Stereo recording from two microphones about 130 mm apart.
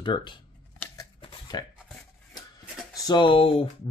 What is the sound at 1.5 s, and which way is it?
Speech, 30° left (ahead or behind).